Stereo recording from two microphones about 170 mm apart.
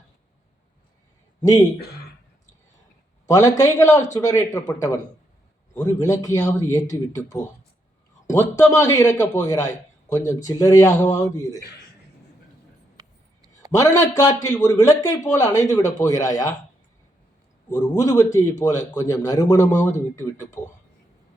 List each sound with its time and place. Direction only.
1.4 s speech: 20° left (ahead or behind)
3.2 s speech: 20° left (ahead or behind)
13.0 s a sound: 20° right (ahead or behind)
13.7 s speech: 20° left (ahead or behind)
17.7 s speech: 20° left (ahead or behind)